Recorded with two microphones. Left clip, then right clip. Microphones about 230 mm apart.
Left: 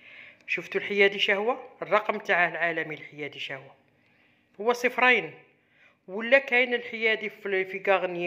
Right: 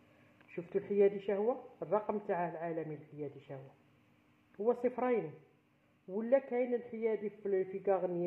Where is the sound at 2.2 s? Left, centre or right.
Left.